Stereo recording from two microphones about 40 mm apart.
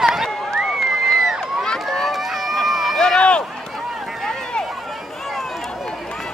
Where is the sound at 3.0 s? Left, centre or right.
Left.